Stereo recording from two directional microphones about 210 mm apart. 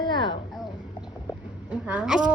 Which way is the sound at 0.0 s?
20° left (ahead or behind).